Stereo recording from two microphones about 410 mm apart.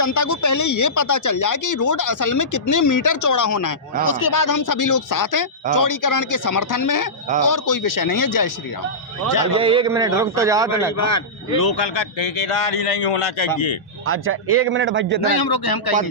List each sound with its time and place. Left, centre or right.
0.0 s speech: left
9.6 s a man's voice: centre
10.9 s speech: left
14.1 s a man's voice: right
15.3 s a man's voice: left